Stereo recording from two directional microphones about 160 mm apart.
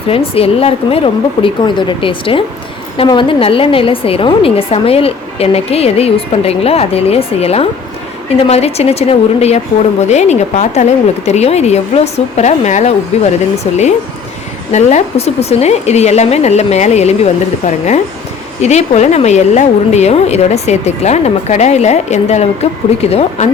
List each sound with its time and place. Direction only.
0.1 s a woman's voice: 35° left (ahead or behind)